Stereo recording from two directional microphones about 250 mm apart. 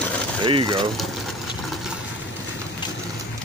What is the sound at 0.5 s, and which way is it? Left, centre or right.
Speech, centre.